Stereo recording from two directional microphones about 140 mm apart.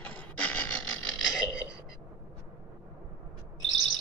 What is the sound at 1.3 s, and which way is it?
Burping, 5° right (ahead or behind).